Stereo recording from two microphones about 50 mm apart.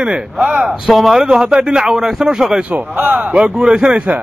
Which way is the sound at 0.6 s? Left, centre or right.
Centre.